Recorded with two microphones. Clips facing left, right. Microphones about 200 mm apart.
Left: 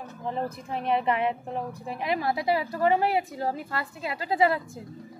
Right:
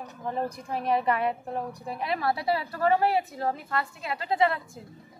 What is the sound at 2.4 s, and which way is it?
A woman's voice, 20° left (ahead or behind).